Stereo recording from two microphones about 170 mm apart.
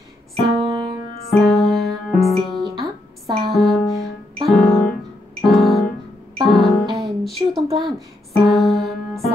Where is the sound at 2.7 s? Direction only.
30° right (ahead or behind).